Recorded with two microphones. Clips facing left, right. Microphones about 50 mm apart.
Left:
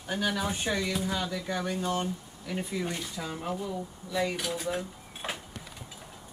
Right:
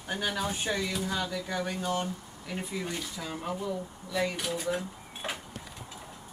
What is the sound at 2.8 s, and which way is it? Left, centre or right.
Speech, centre.